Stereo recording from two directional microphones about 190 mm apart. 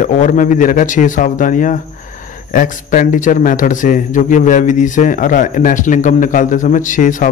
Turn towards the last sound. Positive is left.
turn(degrees=45)  # may be behind; listen again after turning